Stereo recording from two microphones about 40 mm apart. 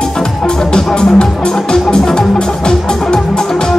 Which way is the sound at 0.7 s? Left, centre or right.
Centre.